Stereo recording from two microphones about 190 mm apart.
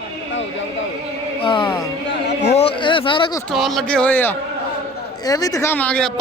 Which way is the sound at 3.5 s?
Centre (ahead or behind).